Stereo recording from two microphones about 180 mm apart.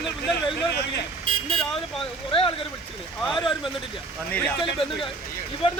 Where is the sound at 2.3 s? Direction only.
30° left (ahead or behind).